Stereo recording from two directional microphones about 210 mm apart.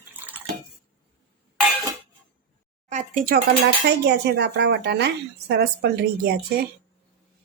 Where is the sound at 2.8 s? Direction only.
35° right (ahead or behind).